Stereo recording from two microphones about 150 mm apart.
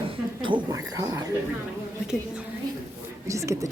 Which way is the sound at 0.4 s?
30° right (ahead or behind).